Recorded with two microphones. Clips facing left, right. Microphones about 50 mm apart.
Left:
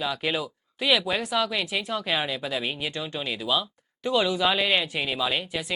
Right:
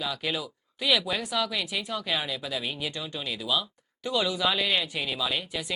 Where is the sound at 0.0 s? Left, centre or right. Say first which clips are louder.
Left 4 dB; centre.